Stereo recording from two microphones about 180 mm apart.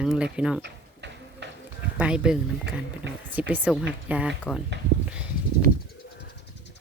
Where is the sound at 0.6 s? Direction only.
70° right (ahead or behind).